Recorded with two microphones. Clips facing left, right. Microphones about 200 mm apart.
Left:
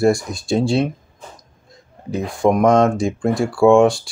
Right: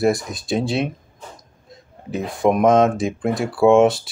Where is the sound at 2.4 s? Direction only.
15° right (ahead or behind).